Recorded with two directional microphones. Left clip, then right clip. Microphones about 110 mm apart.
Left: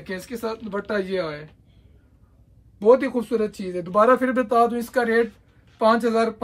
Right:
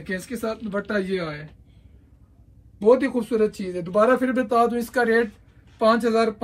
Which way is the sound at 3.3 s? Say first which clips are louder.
Right 2 dB; 80° left.